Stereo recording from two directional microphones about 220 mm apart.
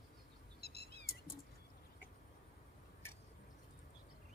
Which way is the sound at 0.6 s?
50° left (ahead or behind).